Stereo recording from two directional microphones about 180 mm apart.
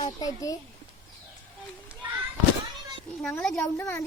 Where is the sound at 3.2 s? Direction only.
5° left (ahead or behind).